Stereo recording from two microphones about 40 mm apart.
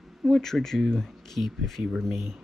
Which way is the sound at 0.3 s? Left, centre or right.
Centre.